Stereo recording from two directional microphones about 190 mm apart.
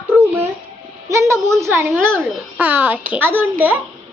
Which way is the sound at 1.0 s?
15° right (ahead or behind).